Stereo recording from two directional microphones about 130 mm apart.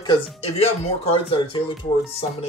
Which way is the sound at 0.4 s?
50° left (ahead or behind).